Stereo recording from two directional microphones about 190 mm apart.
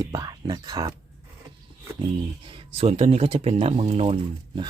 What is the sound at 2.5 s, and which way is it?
Speech, 35° right (ahead or behind).